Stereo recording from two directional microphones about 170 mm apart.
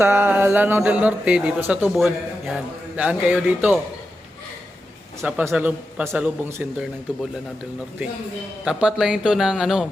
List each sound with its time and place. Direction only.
0.0 s speech: 10° right (ahead or behind)
1.9 s speech: centre (ahead or behind)
5.2 s speech: 10° right (ahead or behind)
8.6 s speech: 5° right (ahead or behind)